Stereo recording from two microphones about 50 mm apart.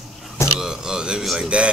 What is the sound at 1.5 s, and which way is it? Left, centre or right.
Speech, right.